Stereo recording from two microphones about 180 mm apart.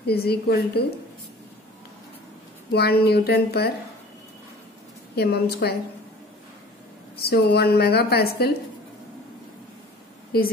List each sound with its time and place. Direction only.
0.0 s a woman's voice: 60° left (ahead or behind)
2.7 s a woman's voice: 60° left (ahead or behind)
5.1 s a woman's voice: 60° left (ahead or behind)
7.2 s a woman's voice: 65° left (ahead or behind)